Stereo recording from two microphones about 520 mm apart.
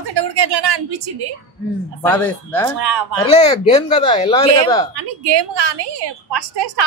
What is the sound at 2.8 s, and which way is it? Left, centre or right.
Speech, right.